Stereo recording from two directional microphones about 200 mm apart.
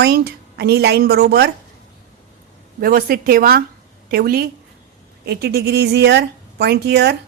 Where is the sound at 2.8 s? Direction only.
45° right (ahead or behind).